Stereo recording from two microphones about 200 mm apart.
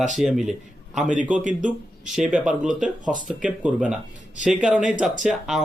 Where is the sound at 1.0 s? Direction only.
40° right (ahead or behind).